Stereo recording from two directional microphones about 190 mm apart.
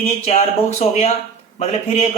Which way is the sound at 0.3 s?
35° left (ahead or behind).